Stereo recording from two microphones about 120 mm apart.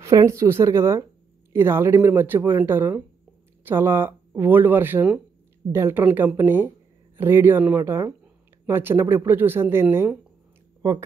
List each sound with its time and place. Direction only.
0.0 s speech: 25° right (ahead or behind)